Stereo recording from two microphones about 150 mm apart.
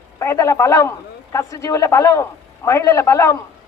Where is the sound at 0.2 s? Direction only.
20° left (ahead or behind).